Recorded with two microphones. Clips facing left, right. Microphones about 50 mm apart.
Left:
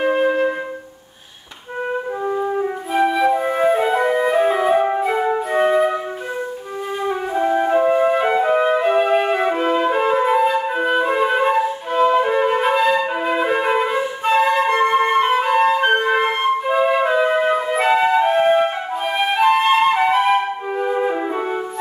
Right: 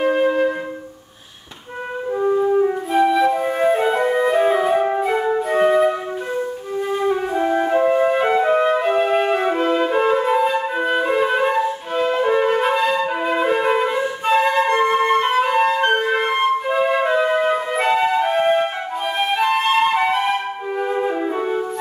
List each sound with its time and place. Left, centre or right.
0.0 s music: centre
2.2 s flute: centre
7.0 s music: centre
19.1 s flute: centre